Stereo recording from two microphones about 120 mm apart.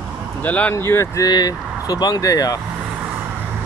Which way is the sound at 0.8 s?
25° left (ahead or behind).